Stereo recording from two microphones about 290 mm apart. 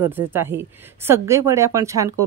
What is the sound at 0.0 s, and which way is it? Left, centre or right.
Speech, centre.